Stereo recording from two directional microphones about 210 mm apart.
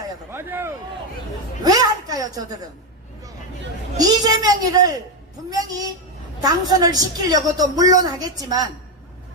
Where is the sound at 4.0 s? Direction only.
20° right (ahead or behind).